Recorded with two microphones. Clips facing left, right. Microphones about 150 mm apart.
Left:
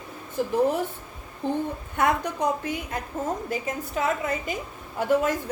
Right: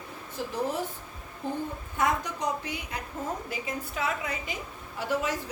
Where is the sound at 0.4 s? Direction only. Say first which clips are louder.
Left 8 dB; 50° left (ahead or behind).